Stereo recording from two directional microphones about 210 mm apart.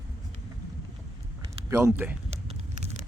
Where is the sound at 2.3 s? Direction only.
30° right (ahead or behind).